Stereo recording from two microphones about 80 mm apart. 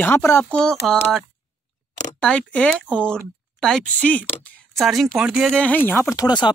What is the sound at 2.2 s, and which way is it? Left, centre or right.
Speech, centre.